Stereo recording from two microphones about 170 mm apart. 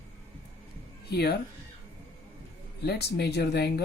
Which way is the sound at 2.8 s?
75° left (ahead or behind).